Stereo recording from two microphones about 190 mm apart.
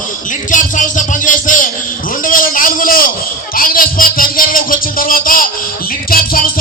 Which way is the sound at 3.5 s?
50° left (ahead or behind).